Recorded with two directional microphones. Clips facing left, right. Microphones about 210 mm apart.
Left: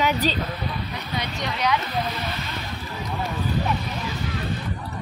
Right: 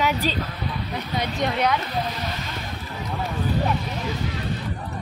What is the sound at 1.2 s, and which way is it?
Speech, 50° right (ahead or behind).